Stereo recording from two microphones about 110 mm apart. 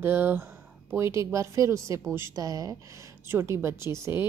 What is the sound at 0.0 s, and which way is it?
A woman's voice, 20° right (ahead or behind).